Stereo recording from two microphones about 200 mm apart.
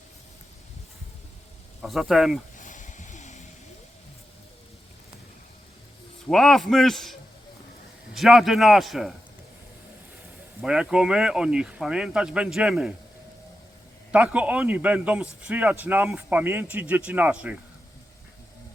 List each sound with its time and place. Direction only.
1.8 s speech: centre (ahead or behind)
2.6 s a sound: 40° left (ahead or behind)
6.2 s speech: centre (ahead or behind)
10.6 s speech: 5° right (ahead or behind)
14.1 s a man's voice: 5° right (ahead or behind)